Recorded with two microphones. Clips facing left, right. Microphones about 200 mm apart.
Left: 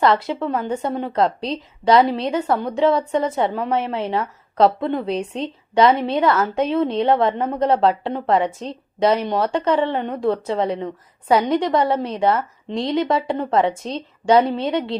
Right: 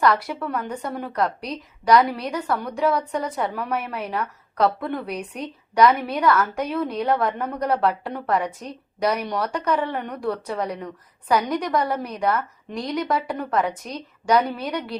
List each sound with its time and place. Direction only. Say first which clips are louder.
0.0 s a woman's voice: left 3 dB; 25° left (ahead or behind)